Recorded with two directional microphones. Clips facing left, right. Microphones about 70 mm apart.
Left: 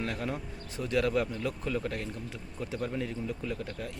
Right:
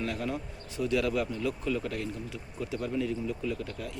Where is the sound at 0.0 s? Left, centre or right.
Left.